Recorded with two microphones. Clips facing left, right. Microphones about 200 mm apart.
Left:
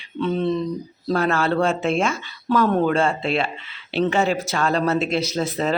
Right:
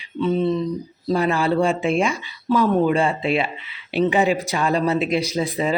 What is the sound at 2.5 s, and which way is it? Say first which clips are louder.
Speech: right 1 dB; centre (ahead or behind).